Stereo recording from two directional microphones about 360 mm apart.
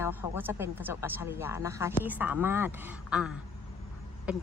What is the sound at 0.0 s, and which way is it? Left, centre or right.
Speech, centre.